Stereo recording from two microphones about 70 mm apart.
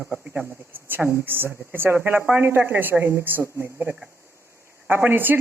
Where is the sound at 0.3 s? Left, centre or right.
Right.